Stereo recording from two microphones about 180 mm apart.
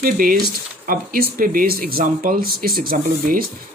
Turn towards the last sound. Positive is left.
turn(degrees=-50)  # may be behind; listen again after turning